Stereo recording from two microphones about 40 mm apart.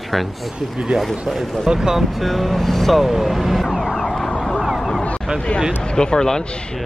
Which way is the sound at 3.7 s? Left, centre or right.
Centre.